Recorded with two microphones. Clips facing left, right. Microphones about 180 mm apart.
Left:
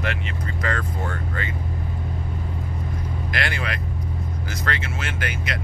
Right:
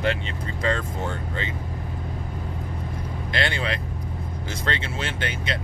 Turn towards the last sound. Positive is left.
turn(degrees=-30)  # may be behind; listen again after turning